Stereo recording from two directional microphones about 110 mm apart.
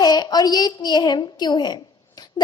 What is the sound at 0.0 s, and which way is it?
A woman's voice, 40° left (ahead or behind).